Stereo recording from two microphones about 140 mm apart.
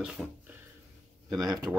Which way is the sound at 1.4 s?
25° right (ahead or behind).